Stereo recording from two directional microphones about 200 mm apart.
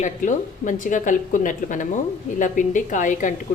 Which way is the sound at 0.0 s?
40° left (ahead or behind).